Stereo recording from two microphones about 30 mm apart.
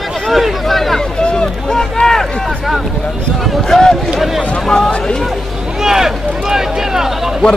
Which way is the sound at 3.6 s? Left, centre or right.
Centre.